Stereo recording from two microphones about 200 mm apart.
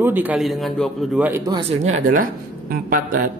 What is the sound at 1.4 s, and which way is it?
Speech, 25° right (ahead or behind).